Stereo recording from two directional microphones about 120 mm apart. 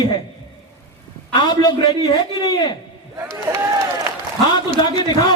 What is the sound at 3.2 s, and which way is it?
Speech, 20° right (ahead or behind).